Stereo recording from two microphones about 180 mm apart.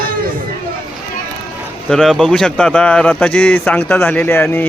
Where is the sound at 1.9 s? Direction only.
Centre (ahead or behind).